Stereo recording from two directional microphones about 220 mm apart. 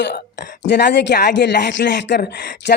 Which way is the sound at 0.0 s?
50° left (ahead or behind).